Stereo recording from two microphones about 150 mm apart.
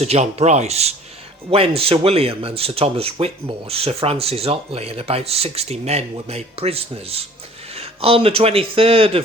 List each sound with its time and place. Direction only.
0.0 s a man's voice: 45° right (ahead or behind)